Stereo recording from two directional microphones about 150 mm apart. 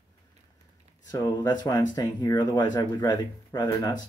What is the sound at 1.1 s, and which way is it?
Speech, 20° left (ahead or behind).